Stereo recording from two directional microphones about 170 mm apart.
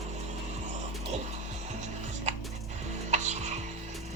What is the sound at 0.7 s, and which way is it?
Printer, 40° right (ahead or behind).